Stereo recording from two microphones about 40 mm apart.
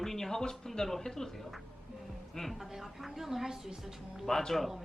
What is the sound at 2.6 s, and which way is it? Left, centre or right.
A woman's voice, centre.